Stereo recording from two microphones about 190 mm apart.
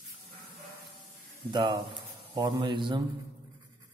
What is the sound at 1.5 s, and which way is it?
A man's voice, 25° right (ahead or behind).